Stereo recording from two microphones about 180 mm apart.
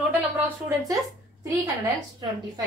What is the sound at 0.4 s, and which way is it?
Speech, 20° right (ahead or behind).